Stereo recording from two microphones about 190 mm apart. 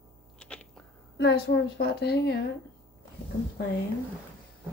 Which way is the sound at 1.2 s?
60° left (ahead or behind).